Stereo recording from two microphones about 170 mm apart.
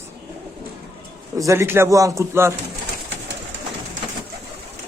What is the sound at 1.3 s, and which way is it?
Speech, 15° right (ahead or behind).